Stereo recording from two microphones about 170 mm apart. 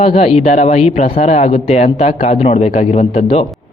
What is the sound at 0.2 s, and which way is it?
A man's voice, 35° left (ahead or behind).